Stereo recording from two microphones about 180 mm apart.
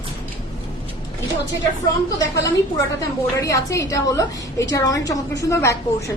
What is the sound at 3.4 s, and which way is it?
A woman's voice, 15° left (ahead or behind).